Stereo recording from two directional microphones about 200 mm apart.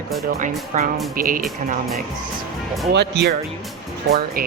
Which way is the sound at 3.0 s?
60° right (ahead or behind).